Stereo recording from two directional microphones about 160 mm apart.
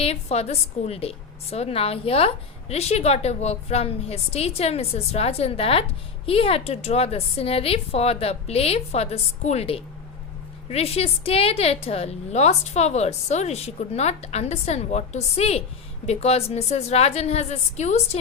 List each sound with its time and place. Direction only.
0.0 s a woman's voice: 40° left (ahead or behind)